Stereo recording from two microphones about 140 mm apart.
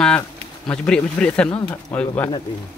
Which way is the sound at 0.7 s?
5° left (ahead or behind).